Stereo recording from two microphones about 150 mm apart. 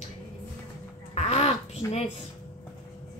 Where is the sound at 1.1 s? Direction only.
45° left (ahead or behind).